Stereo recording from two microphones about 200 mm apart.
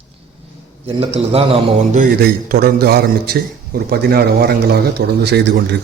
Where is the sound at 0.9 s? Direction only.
30° right (ahead or behind).